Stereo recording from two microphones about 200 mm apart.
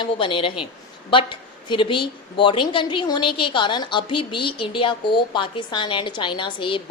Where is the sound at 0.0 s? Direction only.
25° left (ahead or behind).